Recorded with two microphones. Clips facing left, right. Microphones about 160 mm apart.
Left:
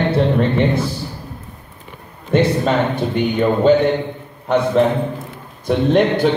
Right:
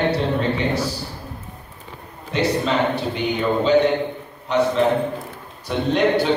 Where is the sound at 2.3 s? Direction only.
50° left (ahead or behind).